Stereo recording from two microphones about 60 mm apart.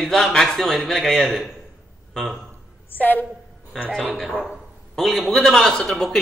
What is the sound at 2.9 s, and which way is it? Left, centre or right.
Speech, left.